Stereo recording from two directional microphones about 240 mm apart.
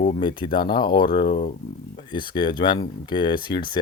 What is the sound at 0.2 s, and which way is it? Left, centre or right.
Speech, centre.